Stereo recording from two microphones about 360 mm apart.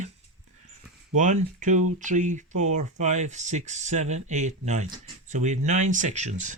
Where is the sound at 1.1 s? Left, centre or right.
Right.